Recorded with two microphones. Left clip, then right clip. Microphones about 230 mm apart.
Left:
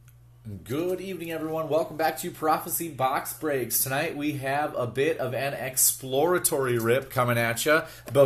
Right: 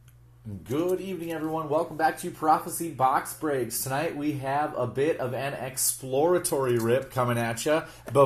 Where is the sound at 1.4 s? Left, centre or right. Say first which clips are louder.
Left 1 dB; left.